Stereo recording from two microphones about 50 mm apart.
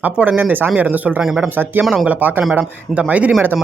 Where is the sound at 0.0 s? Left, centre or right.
Right.